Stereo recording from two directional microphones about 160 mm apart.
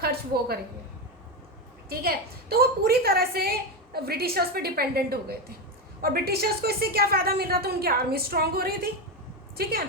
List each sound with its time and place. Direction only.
0.0 s a woman's voice: 80° right
1.9 s a woman's voice: 70° right (ahead or behind)